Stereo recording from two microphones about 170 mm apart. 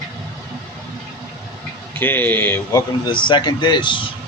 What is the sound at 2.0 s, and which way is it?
Speech, 10° left (ahead or behind).